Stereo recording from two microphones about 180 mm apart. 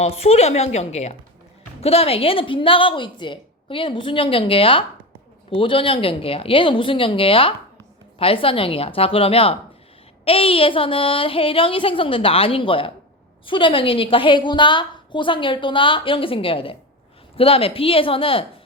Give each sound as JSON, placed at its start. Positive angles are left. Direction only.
{"t": 0.0, "sound": "a woman's voice", "side_deg": 35}